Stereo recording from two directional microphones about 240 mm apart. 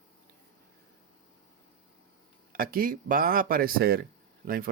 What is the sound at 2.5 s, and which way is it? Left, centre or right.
A man's voice, right.